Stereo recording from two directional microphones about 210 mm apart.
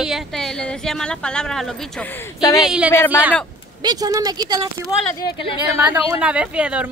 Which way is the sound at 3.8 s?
20° right (ahead or behind).